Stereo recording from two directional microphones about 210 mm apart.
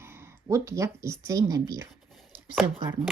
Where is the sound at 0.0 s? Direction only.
10° right (ahead or behind).